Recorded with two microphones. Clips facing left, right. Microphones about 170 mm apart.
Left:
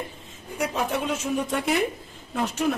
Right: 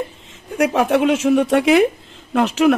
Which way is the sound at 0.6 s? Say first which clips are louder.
Right 11 dB; 80° right.